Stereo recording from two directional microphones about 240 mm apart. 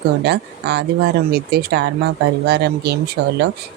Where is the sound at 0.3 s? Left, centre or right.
Right.